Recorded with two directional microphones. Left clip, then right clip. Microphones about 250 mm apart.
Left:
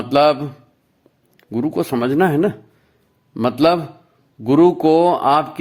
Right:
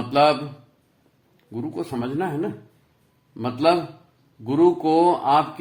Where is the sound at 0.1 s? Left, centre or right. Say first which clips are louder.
Left 4 dB; left.